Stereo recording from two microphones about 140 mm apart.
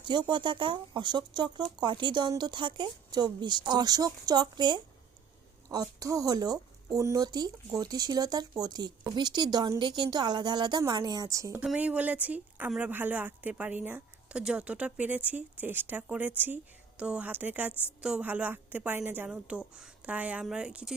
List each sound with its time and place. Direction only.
0.0 s a woman's voice: 30° right (ahead or behind)
11.6 s speech: 5° right (ahead or behind)